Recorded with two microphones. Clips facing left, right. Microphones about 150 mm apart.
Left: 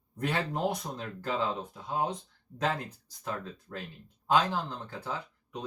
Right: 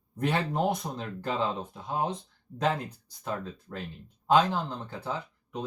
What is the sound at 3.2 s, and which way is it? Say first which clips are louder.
Speech: right 3 dB; 15° right (ahead or behind).